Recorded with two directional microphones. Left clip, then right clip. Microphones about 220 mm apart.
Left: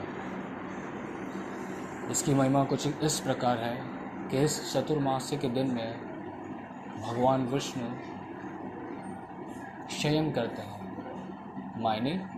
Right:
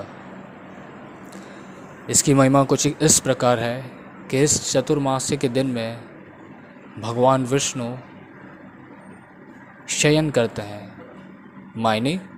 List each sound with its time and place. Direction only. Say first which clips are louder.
2.2 s speech: right 10 dB; 50° right (ahead or behind)
7.0 s speech: right 9 dB; 50° right (ahead or behind)
10.0 s speech: right 11 dB; 50° right (ahead or behind)
11.8 s speech: right 9 dB; 50° right (ahead or behind)